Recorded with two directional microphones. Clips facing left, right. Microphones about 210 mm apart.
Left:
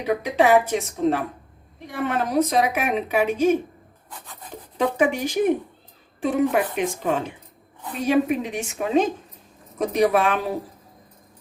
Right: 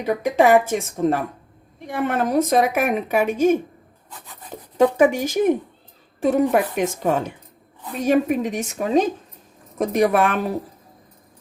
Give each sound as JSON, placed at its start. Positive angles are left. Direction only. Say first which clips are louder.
{"t": 0.0, "sound": "a woman's voice", "louder": "right 2 dB", "side_deg": -50}
{"t": 4.5, "sound": "a sound", "louder": "right 3 dB", "side_deg": -45}
{"t": 4.9, "sound": "a woman's voice", "louder": "right 4 dB", "side_deg": -45}
{"t": 9.7, "sound": "a woman's voice", "louder": "right 1 dB", "side_deg": -50}